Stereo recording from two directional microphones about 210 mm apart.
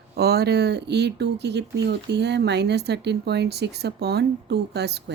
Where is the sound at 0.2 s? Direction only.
50° right (ahead or behind).